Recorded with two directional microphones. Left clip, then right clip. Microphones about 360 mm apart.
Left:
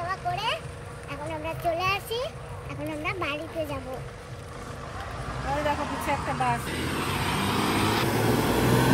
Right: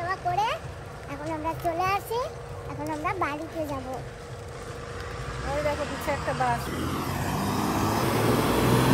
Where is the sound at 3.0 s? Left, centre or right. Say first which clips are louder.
Right 2 dB; right.